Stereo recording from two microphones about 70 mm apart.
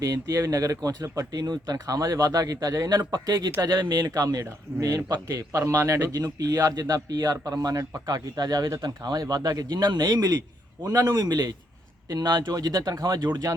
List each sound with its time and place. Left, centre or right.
0.0 s speech: right
2.9 s speech: right
4.1 s speech: right